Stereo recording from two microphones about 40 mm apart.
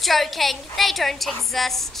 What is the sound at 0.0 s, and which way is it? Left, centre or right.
A woman's voice, centre.